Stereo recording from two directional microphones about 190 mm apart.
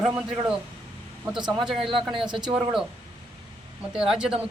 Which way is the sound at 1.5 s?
Centre (ahead or behind).